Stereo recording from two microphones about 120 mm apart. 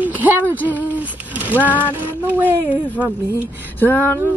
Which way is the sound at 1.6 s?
15° left (ahead or behind).